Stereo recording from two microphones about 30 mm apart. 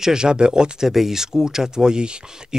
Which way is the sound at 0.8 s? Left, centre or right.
Centre.